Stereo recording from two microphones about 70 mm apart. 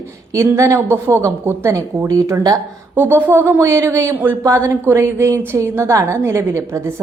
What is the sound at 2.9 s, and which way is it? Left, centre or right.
A woman's voice, right.